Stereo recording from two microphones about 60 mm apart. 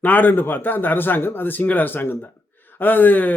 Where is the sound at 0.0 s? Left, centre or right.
Left.